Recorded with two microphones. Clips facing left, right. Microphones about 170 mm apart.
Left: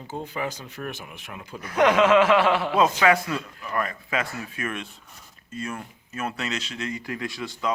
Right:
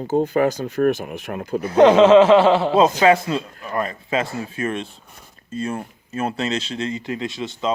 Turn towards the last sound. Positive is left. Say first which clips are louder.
# right 5 dB
turn(degrees=-25)  # may be behind; listen again after turning